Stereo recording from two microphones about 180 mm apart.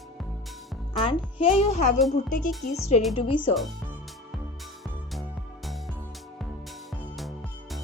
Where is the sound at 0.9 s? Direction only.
30° left (ahead or behind).